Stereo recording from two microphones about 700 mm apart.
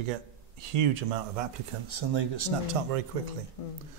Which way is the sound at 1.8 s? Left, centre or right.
Right.